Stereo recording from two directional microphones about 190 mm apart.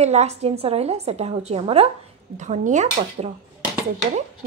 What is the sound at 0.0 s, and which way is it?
Speech, 35° right (ahead or behind).